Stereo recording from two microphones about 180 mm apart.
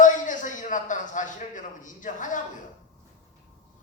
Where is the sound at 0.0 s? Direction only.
45° left (ahead or behind).